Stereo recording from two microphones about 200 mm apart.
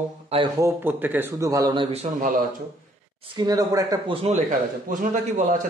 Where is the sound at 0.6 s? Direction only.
15° right (ahead or behind); by 2.3 s 35° right (ahead or behind).